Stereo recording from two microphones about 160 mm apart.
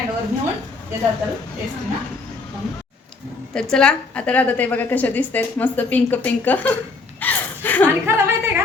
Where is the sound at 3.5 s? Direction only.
5° left (ahead or behind).